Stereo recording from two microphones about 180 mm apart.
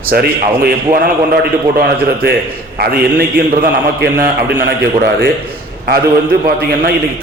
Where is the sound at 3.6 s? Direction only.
60° right (ahead or behind).